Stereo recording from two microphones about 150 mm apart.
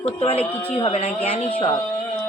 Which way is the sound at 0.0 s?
40° left (ahead or behind).